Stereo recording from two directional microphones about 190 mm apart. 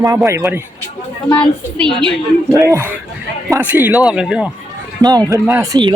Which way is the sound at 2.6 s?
15° right (ahead or behind).